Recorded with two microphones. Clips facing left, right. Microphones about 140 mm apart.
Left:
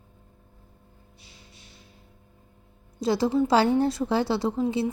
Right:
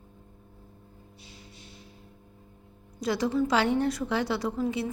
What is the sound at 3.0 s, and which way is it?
A woman's voice, 30° left (ahead or behind).